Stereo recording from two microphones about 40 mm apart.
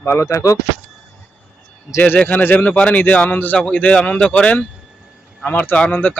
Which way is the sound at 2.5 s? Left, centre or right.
Left.